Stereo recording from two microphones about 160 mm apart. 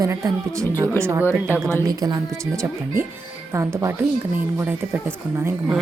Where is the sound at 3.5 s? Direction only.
20° right (ahead or behind).